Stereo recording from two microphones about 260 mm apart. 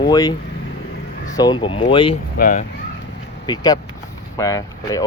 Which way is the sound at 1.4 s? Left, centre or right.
Centre.